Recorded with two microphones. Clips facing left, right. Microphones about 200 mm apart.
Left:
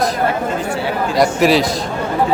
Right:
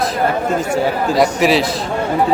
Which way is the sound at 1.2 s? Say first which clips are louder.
Left 1 dB; centre (ahead or behind).